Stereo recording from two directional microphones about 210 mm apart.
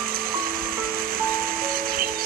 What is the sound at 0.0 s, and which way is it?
Music, 45° right (ahead or behind).